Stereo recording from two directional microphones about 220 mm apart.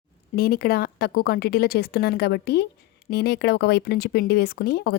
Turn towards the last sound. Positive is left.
turn(degrees=45)  # may be behind; listen again after turning